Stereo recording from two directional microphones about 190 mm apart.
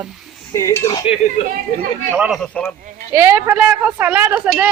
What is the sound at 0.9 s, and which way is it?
Speech, 30° left (ahead or behind).